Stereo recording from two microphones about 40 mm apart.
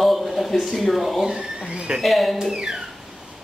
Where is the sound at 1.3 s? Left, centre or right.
Right.